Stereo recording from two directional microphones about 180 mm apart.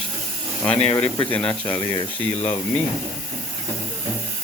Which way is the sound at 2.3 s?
40° left (ahead or behind).